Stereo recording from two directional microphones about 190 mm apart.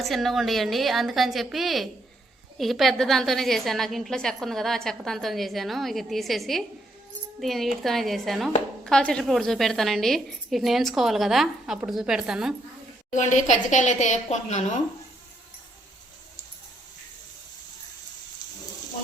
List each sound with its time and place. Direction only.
0.0 s a woman's voice: centre (ahead or behind)
13.1 s a woman's voice: 40° left (ahead or behind)